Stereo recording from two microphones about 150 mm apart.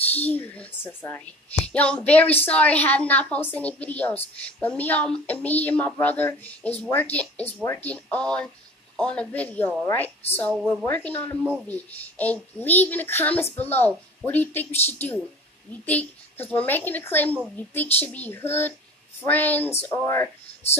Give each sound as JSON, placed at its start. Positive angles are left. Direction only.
{"t": 0.1, "sound": "a woman's voice", "side_deg": 10}